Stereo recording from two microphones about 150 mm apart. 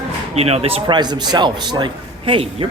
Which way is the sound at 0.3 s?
45° right (ahead or behind).